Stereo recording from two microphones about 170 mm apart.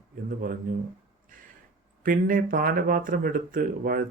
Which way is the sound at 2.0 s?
55° right (ahead or behind).